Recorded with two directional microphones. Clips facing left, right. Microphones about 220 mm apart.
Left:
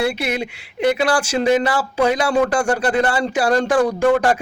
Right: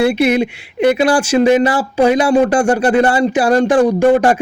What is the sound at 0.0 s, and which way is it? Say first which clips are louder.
Speech: right 8 dB; 20° right (ahead or behind).